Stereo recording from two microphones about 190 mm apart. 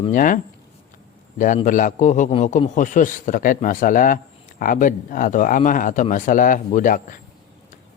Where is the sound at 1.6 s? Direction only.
45° left (ahead or behind).